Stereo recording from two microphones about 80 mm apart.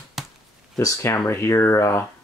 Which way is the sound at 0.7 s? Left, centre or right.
Left.